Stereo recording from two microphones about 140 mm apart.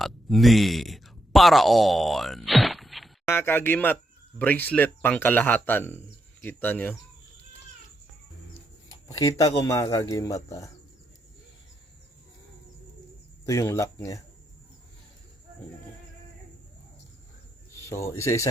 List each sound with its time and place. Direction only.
0.0 s speech: centre (ahead or behind)
3.2 s speech: 15° left (ahead or behind)
9.0 s speech: 25° left (ahead or behind)
13.4 s speech: 20° left (ahead or behind)
17.8 s speech: 20° left (ahead or behind)